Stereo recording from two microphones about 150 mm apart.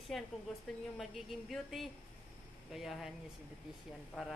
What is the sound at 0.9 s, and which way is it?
Speech, centre (ahead or behind).